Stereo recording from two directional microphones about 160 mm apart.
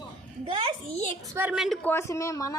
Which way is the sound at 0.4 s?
35° right (ahead or behind).